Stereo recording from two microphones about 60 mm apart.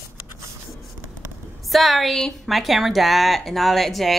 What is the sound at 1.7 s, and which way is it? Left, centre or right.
Speech, centre.